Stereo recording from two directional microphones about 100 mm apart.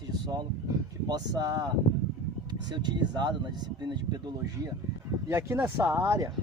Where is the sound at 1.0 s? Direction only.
40° right (ahead or behind).